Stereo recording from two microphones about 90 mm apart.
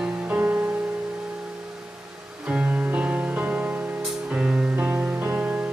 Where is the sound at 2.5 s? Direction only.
15° right (ahead or behind).